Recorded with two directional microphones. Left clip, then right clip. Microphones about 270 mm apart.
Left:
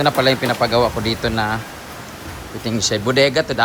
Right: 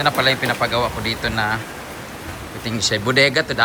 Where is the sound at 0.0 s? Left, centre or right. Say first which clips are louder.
Left 1 dB; left.